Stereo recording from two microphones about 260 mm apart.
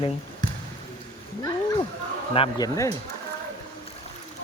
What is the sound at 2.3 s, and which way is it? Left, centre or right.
Speech, centre.